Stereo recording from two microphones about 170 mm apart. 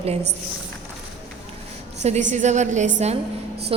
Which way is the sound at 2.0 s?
45° right (ahead or behind).